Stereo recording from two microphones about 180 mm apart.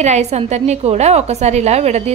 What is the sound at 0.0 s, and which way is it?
A woman's voice, 40° right (ahead or behind).